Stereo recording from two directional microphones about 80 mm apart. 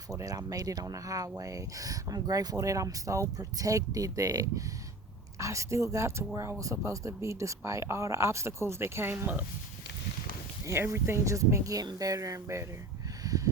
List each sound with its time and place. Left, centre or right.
0.1 s speech: right
5.4 s speech: right
10.7 s speech: right
13.2 s a sound: right